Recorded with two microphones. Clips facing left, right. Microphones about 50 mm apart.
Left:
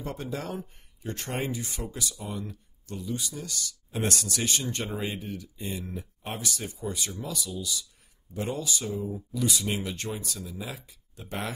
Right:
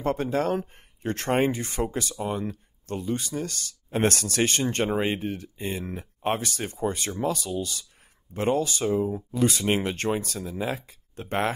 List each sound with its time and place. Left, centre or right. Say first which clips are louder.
0.0 s speech: right 9 dB; right